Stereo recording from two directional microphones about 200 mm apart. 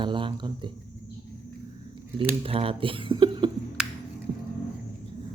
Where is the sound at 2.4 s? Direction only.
30° right (ahead or behind).